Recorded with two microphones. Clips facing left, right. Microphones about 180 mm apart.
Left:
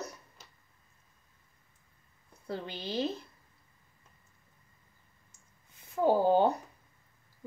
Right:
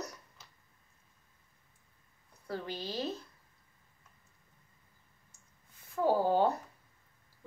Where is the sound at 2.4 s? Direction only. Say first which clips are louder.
Left 1 dB; 25° left (ahead or behind).